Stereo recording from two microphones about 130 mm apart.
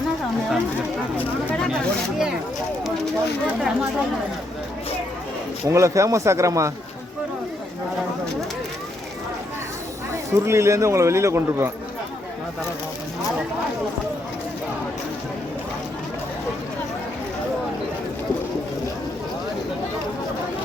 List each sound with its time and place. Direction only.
1.2 s speech: 10° left (ahead or behind)
3.4 s speech: 10° right (ahead or behind)
5.6 s speech: 25° right (ahead or behind)
10.3 s speech: 20° right (ahead or behind)